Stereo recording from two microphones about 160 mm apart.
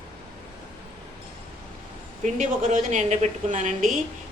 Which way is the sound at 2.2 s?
50° right (ahead or behind).